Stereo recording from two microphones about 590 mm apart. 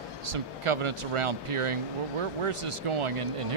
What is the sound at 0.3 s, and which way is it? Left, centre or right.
Speech, right.